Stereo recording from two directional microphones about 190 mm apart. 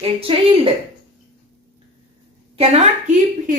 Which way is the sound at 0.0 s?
25° right (ahead or behind).